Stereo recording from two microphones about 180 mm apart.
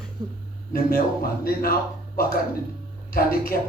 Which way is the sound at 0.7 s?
55° left (ahead or behind).